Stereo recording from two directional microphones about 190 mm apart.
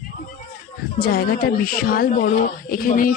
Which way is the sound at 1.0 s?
55° left (ahead or behind).